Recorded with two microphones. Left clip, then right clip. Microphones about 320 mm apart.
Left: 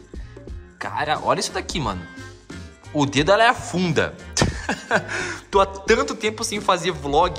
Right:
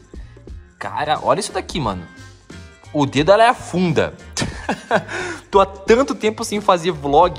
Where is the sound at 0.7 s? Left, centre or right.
Centre.